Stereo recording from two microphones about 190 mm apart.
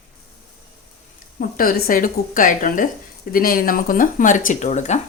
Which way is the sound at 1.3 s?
50° left (ahead or behind).